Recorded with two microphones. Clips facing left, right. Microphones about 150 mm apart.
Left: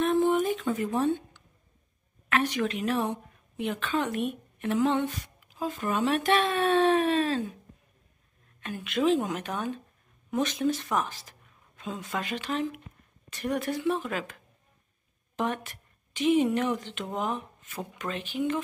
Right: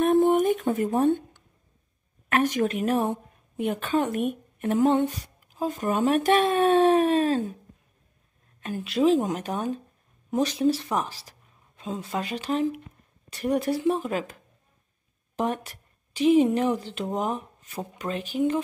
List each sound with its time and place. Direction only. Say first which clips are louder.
0.0 s a sound: right 4 dB; 50° right (ahead or behind)
2.2 s a woman's voice: right 4 dB; 45° right (ahead or behind)
8.5 s a woman's voice: right 4 dB; 40° right (ahead or behind)